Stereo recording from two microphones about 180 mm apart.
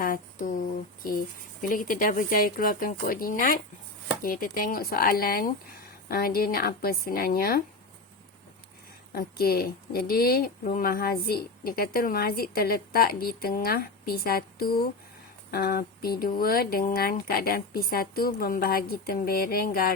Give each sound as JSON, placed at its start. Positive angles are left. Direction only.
{"t": 0.0, "sound": "speech", "side_deg": 50}
{"t": 1.6, "sound": "a woman's voice", "side_deg": 50}
{"t": 9.1, "sound": "a woman's voice", "side_deg": 55}